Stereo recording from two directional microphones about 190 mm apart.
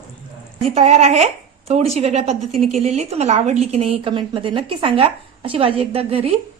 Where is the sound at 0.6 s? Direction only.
35° right (ahead or behind).